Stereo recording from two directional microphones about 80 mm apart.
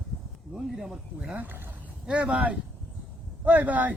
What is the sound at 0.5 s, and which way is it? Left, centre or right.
Speech, centre.